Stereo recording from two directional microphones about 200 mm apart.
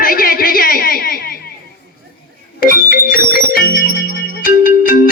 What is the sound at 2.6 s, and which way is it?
Music, 45° left (ahead or behind).